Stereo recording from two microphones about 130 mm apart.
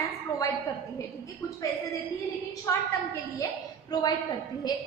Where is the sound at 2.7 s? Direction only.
25° left (ahead or behind).